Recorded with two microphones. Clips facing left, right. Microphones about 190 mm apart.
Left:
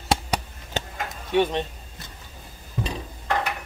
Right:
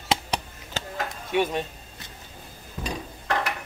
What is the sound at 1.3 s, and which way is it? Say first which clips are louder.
Speech: left 3 dB; 25° left (ahead or behind).